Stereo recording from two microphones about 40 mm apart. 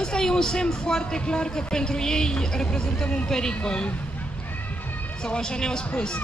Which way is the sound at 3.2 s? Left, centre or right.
Centre.